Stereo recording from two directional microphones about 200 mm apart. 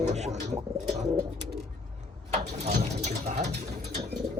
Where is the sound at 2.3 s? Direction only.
35° right (ahead or behind).